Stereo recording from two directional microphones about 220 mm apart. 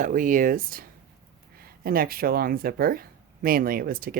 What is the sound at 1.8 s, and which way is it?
Speech, 40° right (ahead or behind).